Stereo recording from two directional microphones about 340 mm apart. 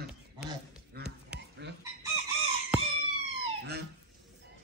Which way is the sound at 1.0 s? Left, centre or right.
Right.